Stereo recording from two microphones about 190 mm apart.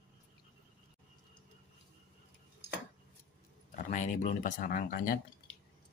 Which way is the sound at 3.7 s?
40° left (ahead or behind).